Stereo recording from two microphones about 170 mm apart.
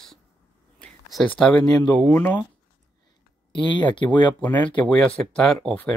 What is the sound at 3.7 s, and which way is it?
Speech, 25° left (ahead or behind).